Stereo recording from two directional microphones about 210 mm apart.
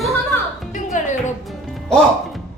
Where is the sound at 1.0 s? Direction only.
35° left (ahead or behind).